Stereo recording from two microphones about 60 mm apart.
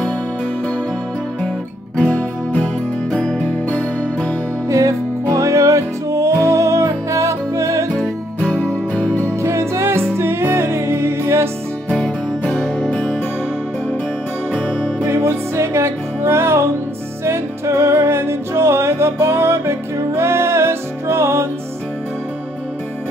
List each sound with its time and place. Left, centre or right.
2.0 s music: left
4.6 s music: right
9.1 s music: left
9.4 s music: right
11.9 s music: centre
14.5 s music: centre
15.0 s music: right